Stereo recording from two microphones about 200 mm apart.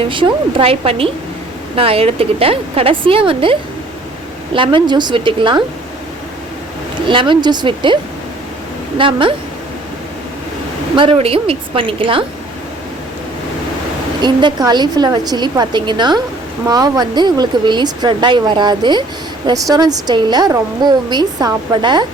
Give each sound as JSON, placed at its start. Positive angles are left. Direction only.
{"t": 0.1, "sound": "a woman's voice", "side_deg": -25}
{"t": 7.1, "sound": "a woman's voice", "side_deg": -25}
{"t": 9.0, "sound": "a woman's voice", "side_deg": -25}
{"t": 10.9, "sound": "a woman's voice", "side_deg": -25}
{"t": 14.2, "sound": "a woman's voice", "side_deg": -20}